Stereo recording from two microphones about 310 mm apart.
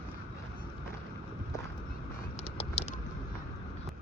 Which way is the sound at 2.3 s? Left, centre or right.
Centre.